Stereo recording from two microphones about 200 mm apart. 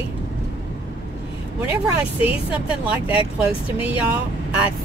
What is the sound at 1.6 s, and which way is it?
Speech, 10° right (ahead or behind).